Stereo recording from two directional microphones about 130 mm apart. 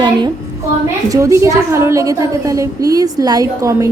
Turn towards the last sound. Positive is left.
turn(degrees=-25)  # may be behind; listen again after turning